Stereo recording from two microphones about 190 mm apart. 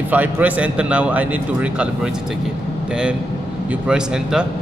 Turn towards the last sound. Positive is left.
turn(degrees=-5)  # may be behind; listen again after turning